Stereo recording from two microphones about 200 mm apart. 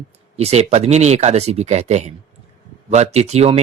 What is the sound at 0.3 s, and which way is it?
Speech, 30° right (ahead or behind).